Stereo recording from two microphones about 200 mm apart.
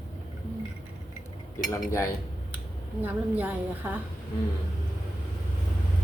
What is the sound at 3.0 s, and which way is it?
Speech, 10° right (ahead or behind).